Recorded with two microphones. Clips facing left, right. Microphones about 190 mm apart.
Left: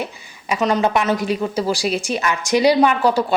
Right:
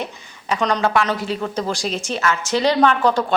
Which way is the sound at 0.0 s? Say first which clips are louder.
Left 1 dB; 10° left (ahead or behind).